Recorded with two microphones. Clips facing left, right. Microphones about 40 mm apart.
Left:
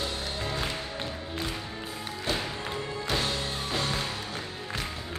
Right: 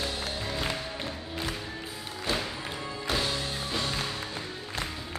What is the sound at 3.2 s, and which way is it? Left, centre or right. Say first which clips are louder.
Music: even; left.